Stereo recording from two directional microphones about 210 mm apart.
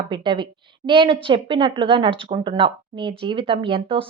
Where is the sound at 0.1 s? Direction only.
20° right (ahead or behind).